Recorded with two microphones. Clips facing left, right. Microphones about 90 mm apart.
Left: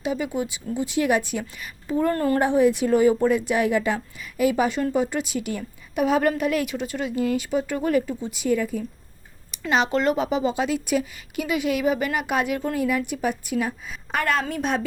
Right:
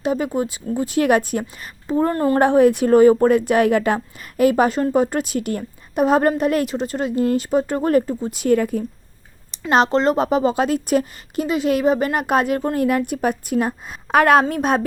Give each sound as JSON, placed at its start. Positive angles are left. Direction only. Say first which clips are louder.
{"t": 0.0, "sound": "a woman's voice", "louder": "right 5 dB", "side_deg": -45}
{"t": 1.9, "sound": "a woman's voice", "louder": "right 4 dB", "side_deg": -25}
{"t": 2.4, "sound": "a woman's voice", "louder": "right 7 dB", "side_deg": -55}
{"t": 9.6, "sound": "a woman's voice", "louder": "right 6 dB", "side_deg": -45}
{"t": 9.9, "sound": "a woman's voice", "louder": "right 4 dB", "side_deg": -30}
{"t": 10.2, "sound": "a woman's voice", "louder": "right 5 dB", "side_deg": -45}